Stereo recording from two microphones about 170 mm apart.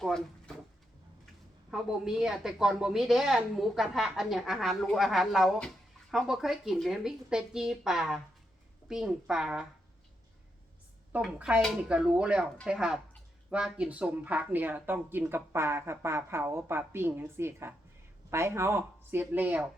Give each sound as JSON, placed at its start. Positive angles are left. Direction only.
{"t": 0.0, "sound": "speech", "side_deg": 5}
{"t": 1.7, "sound": "a woman's voice", "side_deg": -5}
{"t": 11.1, "sound": "a woman's voice", "side_deg": -5}